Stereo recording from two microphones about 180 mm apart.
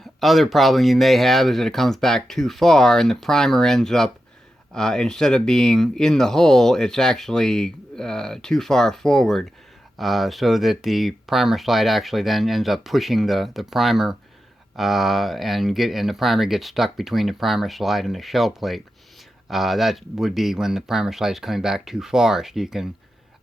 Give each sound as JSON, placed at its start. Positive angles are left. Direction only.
{"t": 0.0, "sound": "speech", "side_deg": 0}